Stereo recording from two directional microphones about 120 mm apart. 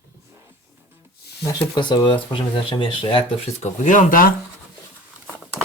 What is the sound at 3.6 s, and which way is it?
Speech, 90° left.